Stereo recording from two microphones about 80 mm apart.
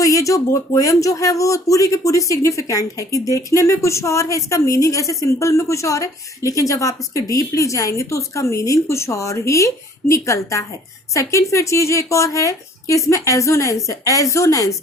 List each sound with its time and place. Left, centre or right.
0.0 s speech: left